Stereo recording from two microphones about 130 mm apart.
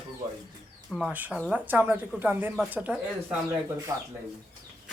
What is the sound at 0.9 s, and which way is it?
Speech, 5° right (ahead or behind).